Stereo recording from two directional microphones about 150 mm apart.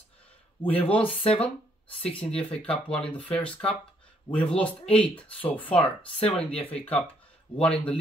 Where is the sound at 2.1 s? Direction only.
5° left (ahead or behind).